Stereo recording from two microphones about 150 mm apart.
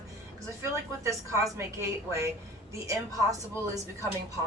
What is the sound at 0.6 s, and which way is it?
Speech, 20° right (ahead or behind).